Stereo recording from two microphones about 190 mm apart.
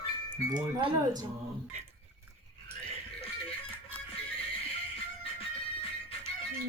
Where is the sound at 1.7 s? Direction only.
35° right (ahead or behind).